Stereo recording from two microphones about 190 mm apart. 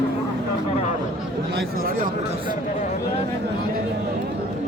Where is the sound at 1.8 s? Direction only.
50° right (ahead or behind).